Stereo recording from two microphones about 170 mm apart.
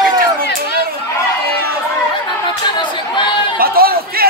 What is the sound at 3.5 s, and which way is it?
Chatter, 60° right (ahead or behind).